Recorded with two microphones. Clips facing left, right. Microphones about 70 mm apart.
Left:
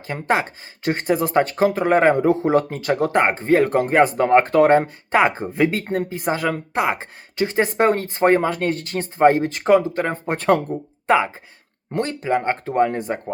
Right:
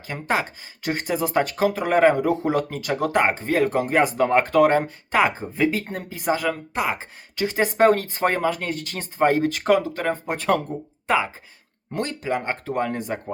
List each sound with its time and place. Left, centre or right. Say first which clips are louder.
0.1 s a woman's voice: left 3 dB; left
6.1 s a woman's voice: left 1 dB; left
11.0 s a sound: left 4 dB; left
11.9 s a woman's voice: left 4 dB; left